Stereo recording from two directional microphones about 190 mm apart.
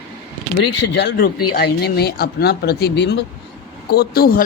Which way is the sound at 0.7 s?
65° left (ahead or behind).